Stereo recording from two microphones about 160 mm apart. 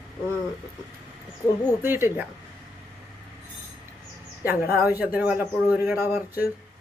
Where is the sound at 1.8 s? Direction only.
15° right (ahead or behind).